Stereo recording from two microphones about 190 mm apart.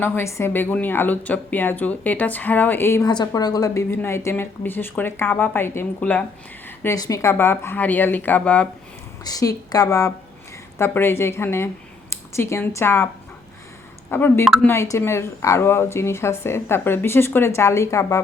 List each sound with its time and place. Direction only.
0.0 s a woman's voice: 15° left (ahead or behind)
9.2 s a woman's voice: 20° left (ahead or behind)
14.1 s a woman's voice: 10° left (ahead or behind)